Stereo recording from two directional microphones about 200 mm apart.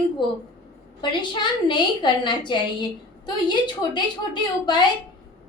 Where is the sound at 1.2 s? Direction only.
25° left (ahead or behind).